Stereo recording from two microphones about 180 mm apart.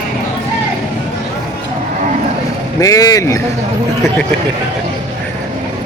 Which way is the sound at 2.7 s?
20° left (ahead or behind).